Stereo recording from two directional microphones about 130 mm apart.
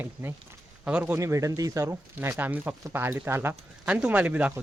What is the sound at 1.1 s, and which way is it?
Speech, 25° right (ahead or behind).